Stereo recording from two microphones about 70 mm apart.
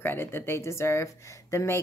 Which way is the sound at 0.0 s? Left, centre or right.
Left.